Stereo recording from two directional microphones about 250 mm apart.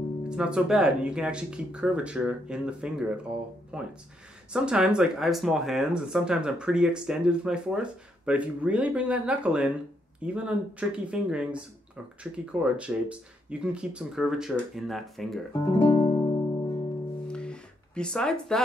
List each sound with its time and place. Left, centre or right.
0.3 s speech: centre
15.6 s music: centre
17.3 s music: centre